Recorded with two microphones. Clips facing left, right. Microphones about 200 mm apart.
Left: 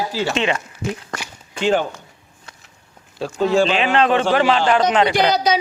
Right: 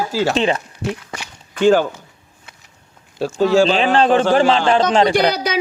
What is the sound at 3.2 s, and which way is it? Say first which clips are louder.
A woman's voice: right 3 dB; 30° right (ahead or behind).